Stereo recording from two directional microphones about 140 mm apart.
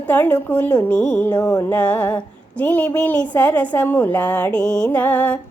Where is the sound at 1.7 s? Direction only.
10° left (ahead or behind).